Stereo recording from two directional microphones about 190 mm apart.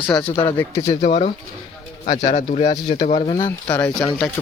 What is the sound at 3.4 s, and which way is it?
Speech, 15° left (ahead or behind).